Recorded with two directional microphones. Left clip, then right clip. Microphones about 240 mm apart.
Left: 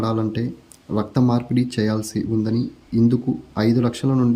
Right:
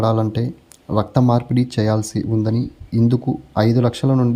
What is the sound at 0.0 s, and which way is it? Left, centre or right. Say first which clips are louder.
Speech: right 4 dB; centre.